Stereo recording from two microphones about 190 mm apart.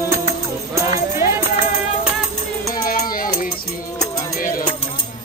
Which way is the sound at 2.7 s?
50° left (ahead or behind).